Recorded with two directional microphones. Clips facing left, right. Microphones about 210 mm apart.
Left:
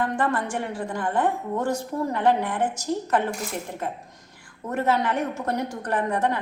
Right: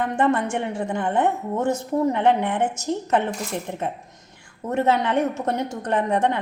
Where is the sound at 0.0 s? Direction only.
25° right (ahead or behind).